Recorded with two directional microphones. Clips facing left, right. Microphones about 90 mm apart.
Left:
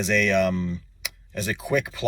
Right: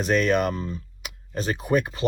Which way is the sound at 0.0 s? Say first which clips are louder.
Even; 40° right (ahead or behind).